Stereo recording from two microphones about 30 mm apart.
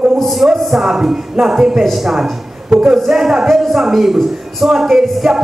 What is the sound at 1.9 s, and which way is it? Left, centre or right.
Speech, centre.